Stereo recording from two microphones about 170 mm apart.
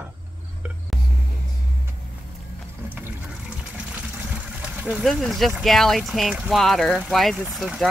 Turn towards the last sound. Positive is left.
turn(degrees=0)  # may be behind; listen again after turning